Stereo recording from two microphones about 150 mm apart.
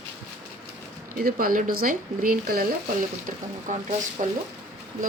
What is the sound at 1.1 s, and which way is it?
Speech, 75° right (ahead or behind).